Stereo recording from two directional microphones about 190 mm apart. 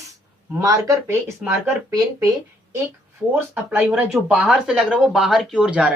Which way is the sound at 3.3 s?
10° right (ahead or behind).